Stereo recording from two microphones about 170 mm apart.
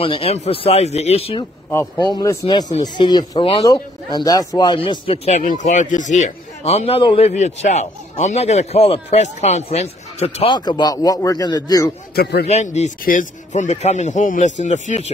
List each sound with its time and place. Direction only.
0.0 s speech: 35° left (ahead or behind)
1.7 s speech: 20° left (ahead or behind)
12.2 s a man's voice: 70° left (ahead or behind)
12.4 s speech: 40° left (ahead or behind)